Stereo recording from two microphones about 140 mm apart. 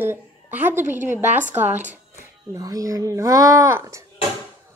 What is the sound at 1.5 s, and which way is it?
Speech, 15° right (ahead or behind).